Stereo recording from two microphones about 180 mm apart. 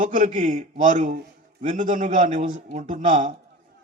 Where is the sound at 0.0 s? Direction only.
45° right (ahead or behind).